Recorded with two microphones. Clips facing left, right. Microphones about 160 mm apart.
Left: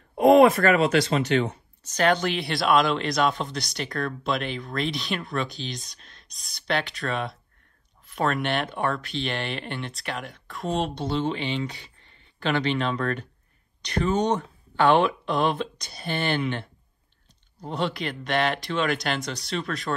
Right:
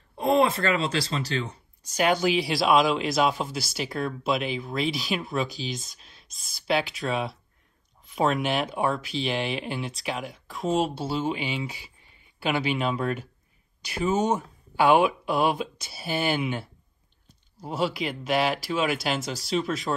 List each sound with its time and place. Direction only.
0.2 s speech: 30° right (ahead or behind)
1.8 s speech: 10° right (ahead or behind)